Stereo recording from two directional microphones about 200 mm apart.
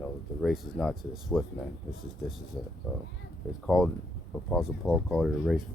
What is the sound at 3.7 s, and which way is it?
Speech, centre (ahead or behind).